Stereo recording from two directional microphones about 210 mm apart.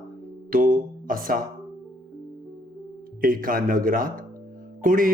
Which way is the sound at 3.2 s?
40° right (ahead or behind).